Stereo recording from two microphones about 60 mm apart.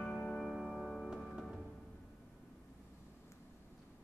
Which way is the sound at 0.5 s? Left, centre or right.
Centre.